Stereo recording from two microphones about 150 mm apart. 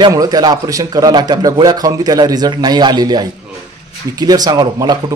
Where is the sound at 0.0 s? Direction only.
25° right (ahead or behind).